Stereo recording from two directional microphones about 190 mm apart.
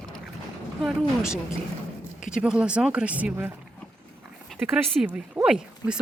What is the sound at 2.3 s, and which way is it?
Speech, 5° right (ahead or behind).